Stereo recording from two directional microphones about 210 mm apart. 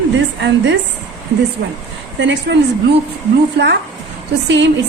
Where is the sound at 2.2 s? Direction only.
60° right (ahead or behind).